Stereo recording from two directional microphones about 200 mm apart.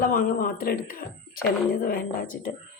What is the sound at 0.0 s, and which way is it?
Speech, 40° left (ahead or behind).